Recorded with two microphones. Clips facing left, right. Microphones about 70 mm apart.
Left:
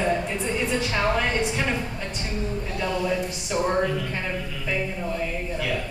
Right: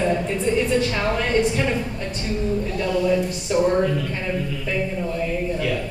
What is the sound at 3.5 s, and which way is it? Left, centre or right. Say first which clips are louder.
Speech: right 6 dB; centre.